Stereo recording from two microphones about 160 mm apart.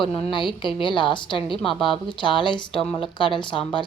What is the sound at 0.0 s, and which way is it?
A woman's voice, 30° left (ahead or behind).